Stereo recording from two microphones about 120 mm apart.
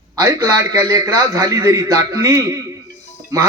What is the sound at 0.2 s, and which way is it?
A man's voice, 25° right (ahead or behind).